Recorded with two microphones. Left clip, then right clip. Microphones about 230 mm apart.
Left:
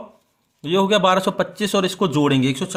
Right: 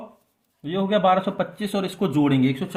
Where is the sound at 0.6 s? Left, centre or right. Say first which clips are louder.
Left 4 dB; left.